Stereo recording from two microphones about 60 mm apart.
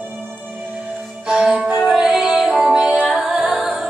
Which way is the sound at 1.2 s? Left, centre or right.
Centre.